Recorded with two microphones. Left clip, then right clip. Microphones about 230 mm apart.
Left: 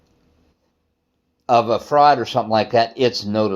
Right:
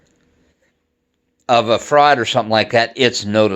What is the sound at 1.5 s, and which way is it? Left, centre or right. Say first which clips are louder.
Speech: right 2 dB; right.